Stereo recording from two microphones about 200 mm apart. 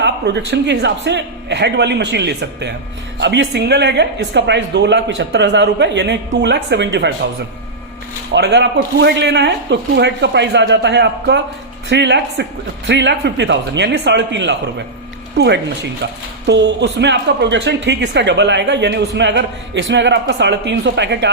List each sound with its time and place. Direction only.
0.0 s speech: 60° right (ahead or behind)
8.3 s speech: 60° right (ahead or behind)